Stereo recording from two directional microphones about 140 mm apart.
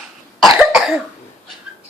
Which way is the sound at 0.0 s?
Centre (ahead or behind).